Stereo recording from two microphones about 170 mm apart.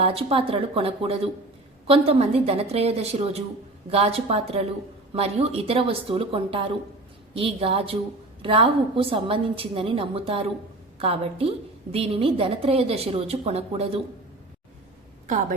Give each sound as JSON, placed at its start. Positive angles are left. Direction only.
{"t": 0.0, "sound": "a woman's voice", "side_deg": -35}